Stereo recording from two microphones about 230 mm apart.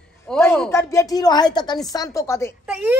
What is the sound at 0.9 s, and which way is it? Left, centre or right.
Speech, centre.